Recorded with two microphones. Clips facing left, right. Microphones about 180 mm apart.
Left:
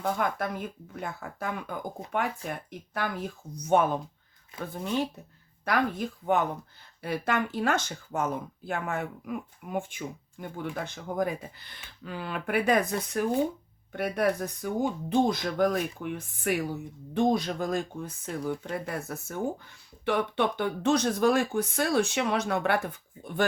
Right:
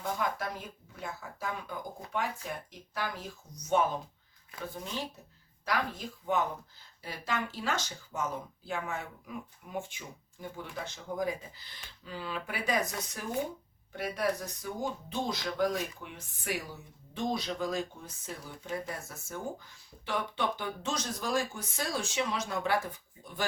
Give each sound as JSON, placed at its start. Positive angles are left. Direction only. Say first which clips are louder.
{"t": 0.0, "sound": "speech", "louder": "left 5 dB", "side_deg": 55}